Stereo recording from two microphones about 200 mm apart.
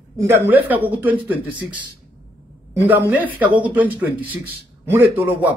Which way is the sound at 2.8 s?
10° right (ahead or behind).